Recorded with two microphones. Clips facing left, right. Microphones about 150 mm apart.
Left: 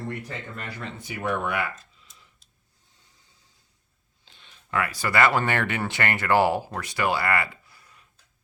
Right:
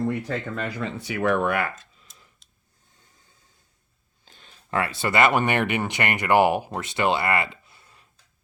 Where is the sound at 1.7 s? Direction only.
90° right.